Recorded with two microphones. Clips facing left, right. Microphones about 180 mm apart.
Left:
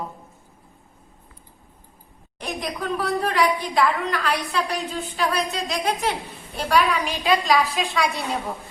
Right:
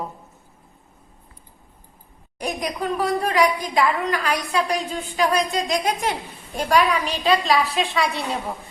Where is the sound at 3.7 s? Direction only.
10° right (ahead or behind).